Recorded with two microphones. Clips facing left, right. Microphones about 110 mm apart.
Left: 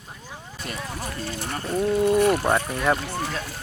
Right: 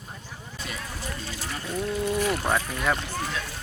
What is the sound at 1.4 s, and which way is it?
Boat, 45° left (ahead or behind).